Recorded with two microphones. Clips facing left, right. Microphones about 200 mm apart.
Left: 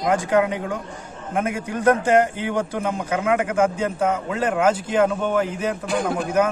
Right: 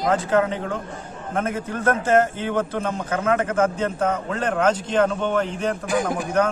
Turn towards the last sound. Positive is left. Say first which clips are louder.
# left 1 dB
turn(degrees=10)  # may be behind; listen again after turning